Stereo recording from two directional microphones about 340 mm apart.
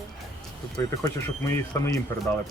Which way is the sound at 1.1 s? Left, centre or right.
Centre.